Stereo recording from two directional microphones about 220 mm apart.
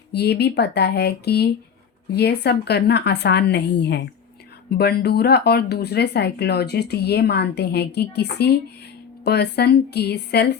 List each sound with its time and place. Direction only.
0.1 s speech: 45° left (ahead or behind)